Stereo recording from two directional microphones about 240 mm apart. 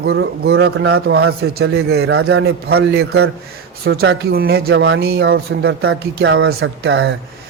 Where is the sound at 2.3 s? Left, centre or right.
Right.